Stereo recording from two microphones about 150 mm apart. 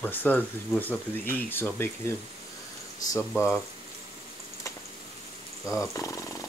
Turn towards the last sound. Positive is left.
turn(degrees=20)  # may be behind; listen again after turning